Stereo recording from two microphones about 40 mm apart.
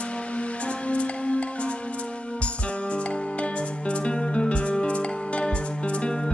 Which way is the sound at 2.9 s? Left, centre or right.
Left.